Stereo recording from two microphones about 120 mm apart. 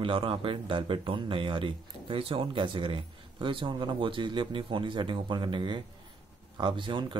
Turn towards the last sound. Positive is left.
turn(degrees=-45)  # may be behind; listen again after turning